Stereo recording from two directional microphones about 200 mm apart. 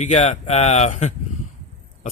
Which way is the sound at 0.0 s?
35° left (ahead or behind).